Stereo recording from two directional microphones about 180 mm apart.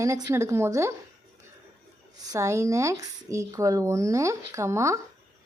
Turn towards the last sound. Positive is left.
turn(degrees=-15)  # may be behind; listen again after turning